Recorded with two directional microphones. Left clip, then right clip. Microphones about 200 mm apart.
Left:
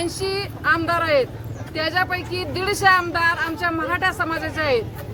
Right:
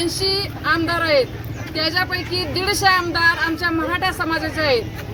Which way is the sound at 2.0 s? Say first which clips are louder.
Right 1 dB; 25° left (ahead or behind).